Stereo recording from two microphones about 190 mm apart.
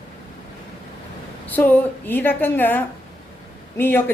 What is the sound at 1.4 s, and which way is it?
A woman's voice, 10° left (ahead or behind).